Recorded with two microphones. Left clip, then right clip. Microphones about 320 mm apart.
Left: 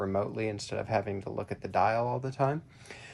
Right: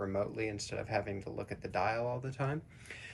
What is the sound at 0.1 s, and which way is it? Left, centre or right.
Speech, left.